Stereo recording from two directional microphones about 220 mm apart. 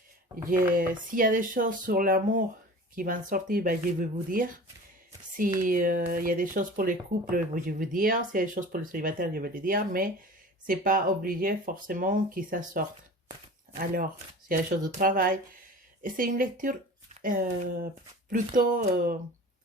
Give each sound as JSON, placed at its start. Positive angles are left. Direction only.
{"t": 0.8, "sound": "speech", "side_deg": -40}
{"t": 5.6, "sound": "speech", "side_deg": -40}